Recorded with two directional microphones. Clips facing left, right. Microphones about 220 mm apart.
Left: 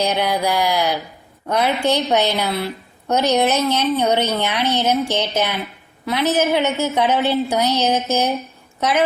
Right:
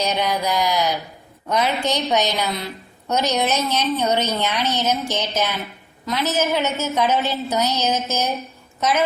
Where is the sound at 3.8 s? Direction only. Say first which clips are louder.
Left 3 dB; 15° left (ahead or behind).